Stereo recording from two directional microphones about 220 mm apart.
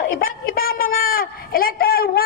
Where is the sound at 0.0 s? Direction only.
40° left (ahead or behind).